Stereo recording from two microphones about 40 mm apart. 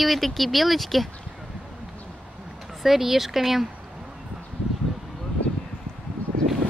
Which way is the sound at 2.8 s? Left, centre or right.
Centre.